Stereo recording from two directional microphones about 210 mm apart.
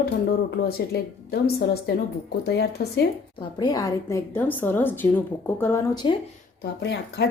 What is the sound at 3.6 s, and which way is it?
A woman's voice, 15° left (ahead or behind).